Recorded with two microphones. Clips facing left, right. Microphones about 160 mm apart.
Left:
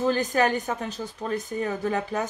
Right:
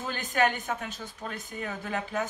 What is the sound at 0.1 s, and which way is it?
A woman's voice, 35° left (ahead or behind).